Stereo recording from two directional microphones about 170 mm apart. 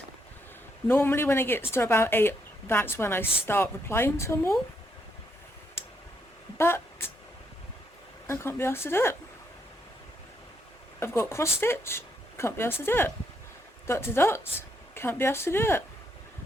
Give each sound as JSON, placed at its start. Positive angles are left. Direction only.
{"t": 0.9, "sound": "speech", "side_deg": 15}
{"t": 6.6, "sound": "speech", "side_deg": 15}
{"t": 8.3, "sound": "speech", "side_deg": 15}
{"t": 11.0, "sound": "speech", "side_deg": 15}